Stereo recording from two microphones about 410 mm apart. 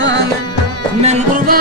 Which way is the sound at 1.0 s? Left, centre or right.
Centre.